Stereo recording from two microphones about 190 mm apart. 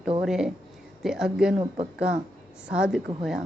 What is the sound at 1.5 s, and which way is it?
Speech, 30° right (ahead or behind).